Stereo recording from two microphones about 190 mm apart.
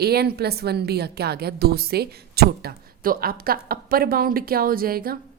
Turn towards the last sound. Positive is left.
turn(degrees=-50)  # may be behind; listen again after turning